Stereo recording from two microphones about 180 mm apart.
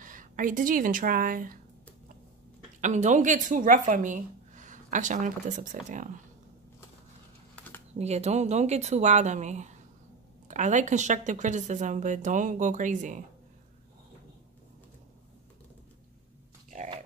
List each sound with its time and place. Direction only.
0.0 s speech: 45° right (ahead or behind)
2.8 s speech: 40° right (ahead or behind)
7.9 s speech: 35° right (ahead or behind)